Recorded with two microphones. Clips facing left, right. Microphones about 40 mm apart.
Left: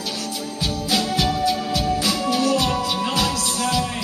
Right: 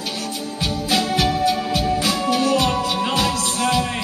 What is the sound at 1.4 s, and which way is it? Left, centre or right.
Music, right.